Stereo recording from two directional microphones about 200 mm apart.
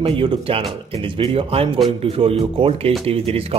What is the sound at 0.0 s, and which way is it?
Speech, 25° right (ahead or behind).